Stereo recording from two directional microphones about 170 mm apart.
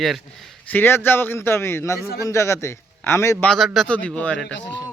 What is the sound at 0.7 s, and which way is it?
Speech, 10° left (ahead or behind).